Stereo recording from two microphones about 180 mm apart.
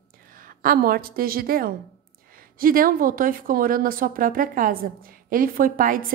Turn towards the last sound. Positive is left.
turn(degrees=-50)  # may be behind; listen again after turning